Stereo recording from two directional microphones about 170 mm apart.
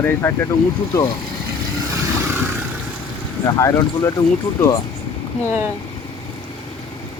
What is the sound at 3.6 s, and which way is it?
Speech, 20° left (ahead or behind).